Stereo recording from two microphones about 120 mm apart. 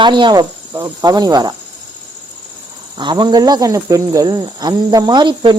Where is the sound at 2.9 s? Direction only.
40° right (ahead or behind).